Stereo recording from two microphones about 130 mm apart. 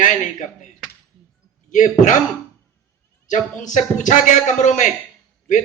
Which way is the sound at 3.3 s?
75° left (ahead or behind).